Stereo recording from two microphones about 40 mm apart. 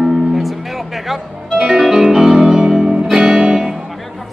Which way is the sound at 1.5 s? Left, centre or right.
Centre.